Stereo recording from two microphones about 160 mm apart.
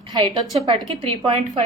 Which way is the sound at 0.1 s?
35° right (ahead or behind).